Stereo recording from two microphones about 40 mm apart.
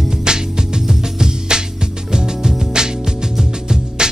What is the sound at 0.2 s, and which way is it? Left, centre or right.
Music, centre.